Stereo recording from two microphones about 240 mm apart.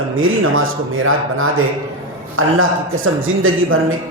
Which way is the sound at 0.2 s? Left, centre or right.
Right.